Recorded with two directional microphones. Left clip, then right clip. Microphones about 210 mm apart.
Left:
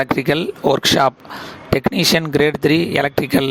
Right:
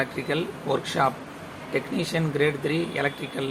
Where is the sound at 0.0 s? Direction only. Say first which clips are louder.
Left 10 dB; 55° left (ahead or behind).